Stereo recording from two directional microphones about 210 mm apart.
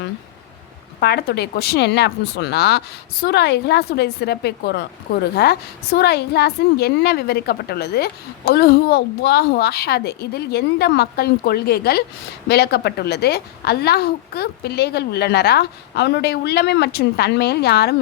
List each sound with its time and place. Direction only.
0.9 s a woman's voice: 50° left (ahead or behind)